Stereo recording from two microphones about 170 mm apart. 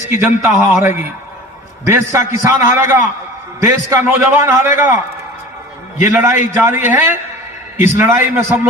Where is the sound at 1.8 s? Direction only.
15° right (ahead or behind).